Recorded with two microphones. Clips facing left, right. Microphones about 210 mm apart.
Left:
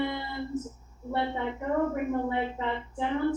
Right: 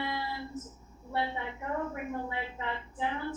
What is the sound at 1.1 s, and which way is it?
Speech, 55° left (ahead or behind).